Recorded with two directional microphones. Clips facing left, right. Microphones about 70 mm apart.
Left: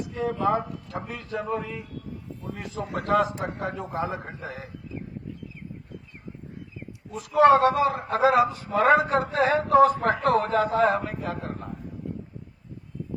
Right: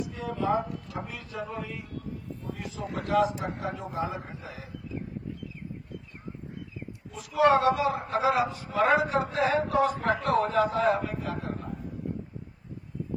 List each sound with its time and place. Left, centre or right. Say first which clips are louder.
0.0 s a sound: left 5 dB; left
1.0 s a man's voice: left 5 dB; left
7.1 s a man's voice: left 5 dB; left